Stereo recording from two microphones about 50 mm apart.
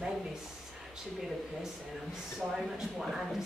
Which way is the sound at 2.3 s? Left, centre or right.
Centre.